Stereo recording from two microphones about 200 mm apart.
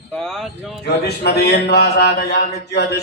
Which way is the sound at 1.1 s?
55° left (ahead or behind).